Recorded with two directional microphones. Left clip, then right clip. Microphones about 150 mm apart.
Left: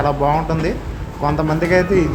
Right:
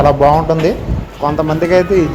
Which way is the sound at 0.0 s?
20° right (ahead or behind).